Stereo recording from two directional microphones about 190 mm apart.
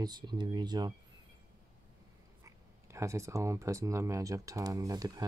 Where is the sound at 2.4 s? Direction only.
15° right (ahead or behind).